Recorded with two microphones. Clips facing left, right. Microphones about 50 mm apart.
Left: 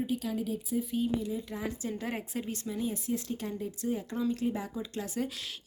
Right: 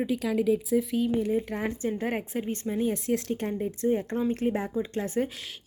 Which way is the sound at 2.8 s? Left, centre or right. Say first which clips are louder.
Right 6 dB; right.